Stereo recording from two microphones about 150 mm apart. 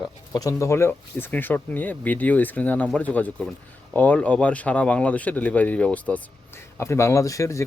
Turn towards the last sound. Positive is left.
turn(degrees=20)  # may be behind; listen again after turning